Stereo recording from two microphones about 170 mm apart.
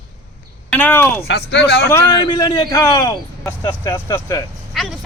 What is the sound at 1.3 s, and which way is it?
Speech, 85° left.